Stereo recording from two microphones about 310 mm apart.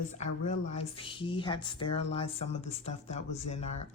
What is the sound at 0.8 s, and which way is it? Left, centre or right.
Speech, centre.